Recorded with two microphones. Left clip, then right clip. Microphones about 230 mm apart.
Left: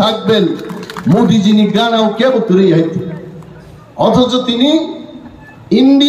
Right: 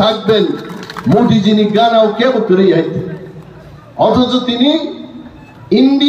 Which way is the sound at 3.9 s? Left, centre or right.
Left.